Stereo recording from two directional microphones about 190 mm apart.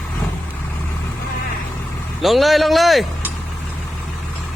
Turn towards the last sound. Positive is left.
turn(degrees=0)  # may be behind; listen again after turning